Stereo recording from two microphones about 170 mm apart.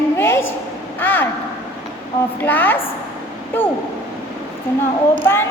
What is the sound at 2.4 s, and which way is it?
A woman's voice, 10° left (ahead or behind).